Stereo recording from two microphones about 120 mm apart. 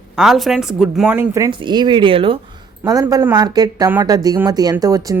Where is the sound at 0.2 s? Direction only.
Centre (ahead or behind).